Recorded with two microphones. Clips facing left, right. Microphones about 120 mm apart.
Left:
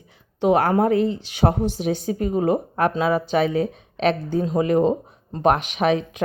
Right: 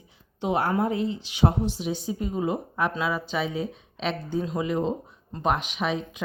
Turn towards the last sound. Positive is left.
turn(degrees=65)  # may be behind; listen again after turning